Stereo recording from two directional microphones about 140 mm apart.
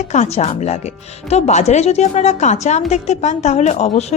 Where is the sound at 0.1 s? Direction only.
55° left (ahead or behind).